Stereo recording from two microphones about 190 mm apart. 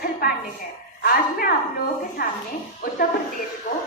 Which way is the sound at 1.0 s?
50° left (ahead or behind).